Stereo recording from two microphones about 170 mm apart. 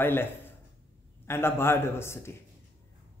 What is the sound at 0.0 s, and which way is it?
A man's voice, 15° left (ahead or behind).